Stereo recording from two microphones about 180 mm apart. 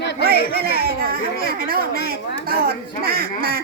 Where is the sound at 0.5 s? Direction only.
60° right (ahead or behind).